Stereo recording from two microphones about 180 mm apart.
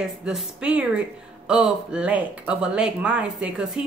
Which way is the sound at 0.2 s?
5° right (ahead or behind).